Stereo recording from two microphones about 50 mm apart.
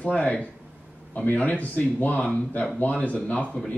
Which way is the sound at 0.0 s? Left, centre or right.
Left.